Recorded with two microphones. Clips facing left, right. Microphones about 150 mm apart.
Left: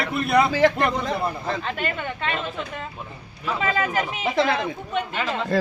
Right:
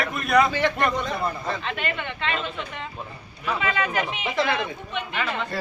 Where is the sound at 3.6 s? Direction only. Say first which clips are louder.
Left 2 dB; 35° left (ahead or behind).